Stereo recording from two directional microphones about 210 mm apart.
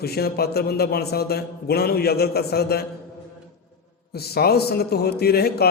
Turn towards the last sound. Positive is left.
turn(degrees=50)  # may be behind; listen again after turning